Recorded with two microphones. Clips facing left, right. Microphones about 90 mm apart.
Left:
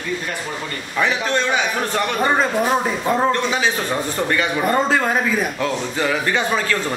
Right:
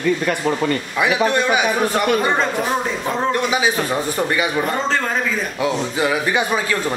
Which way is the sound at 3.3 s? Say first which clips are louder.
Right 1 dB; 10° right (ahead or behind).